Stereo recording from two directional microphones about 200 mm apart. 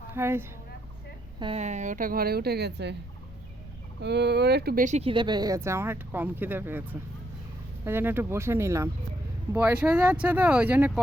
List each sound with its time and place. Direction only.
0.1 s speech: 10° right (ahead or behind)
1.4 s speech: 30° right (ahead or behind); by 2.9 s 55° right (ahead or behind)
4.0 s speech: 55° right (ahead or behind); by 6.8 s 10° right (ahead or behind)
7.9 s speech: 10° right (ahead or behind)